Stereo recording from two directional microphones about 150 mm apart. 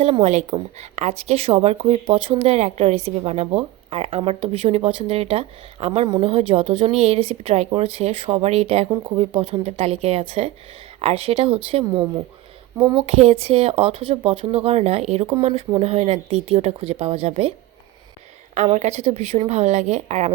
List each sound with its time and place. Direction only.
0.0 s a woman's voice: 45° right (ahead or behind)
18.5 s a woman's voice: 50° right (ahead or behind)